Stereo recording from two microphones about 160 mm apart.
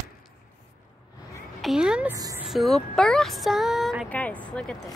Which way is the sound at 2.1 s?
20° right (ahead or behind).